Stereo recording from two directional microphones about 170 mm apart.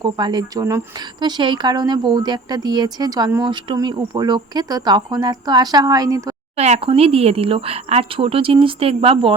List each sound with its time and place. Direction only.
0.0 s speech: 25° right (ahead or behind)
6.6 s speech: 35° right (ahead or behind)